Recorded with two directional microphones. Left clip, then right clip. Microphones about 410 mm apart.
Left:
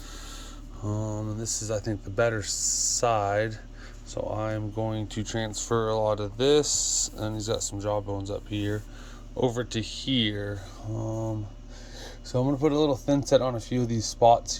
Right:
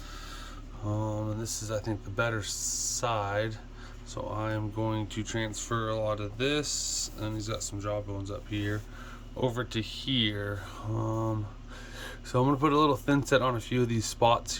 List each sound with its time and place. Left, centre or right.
0.9 s speech: centre
10.9 s speech: centre
11.9 s speech: centre